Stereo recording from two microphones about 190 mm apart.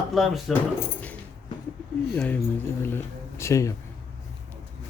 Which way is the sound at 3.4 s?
15° left (ahead or behind).